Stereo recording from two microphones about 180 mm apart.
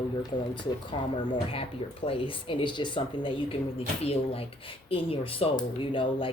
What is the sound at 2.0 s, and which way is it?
Speech, 30° left (ahead or behind).